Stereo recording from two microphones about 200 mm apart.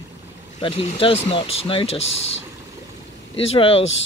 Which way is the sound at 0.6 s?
25° left (ahead or behind).